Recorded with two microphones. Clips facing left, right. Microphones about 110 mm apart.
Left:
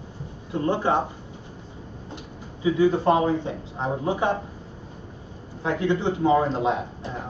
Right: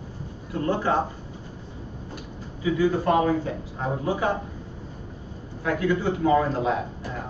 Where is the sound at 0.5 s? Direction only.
20° left (ahead or behind).